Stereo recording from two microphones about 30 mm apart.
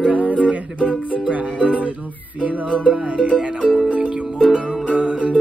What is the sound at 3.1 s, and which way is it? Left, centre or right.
Music, right.